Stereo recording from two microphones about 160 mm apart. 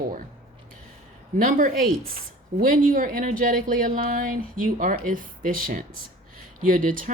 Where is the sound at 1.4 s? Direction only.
55° right (ahead or behind).